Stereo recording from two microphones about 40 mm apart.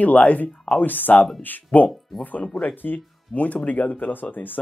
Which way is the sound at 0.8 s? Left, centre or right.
Left.